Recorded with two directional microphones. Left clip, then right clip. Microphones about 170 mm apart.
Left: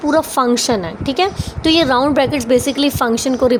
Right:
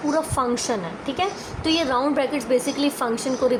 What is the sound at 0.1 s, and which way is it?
A woman's voice, 55° left (ahead or behind).